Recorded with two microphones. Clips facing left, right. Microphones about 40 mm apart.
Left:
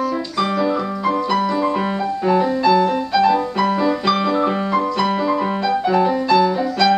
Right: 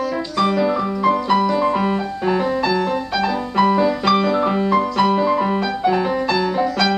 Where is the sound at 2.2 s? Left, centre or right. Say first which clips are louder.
Left 3 dB; centre.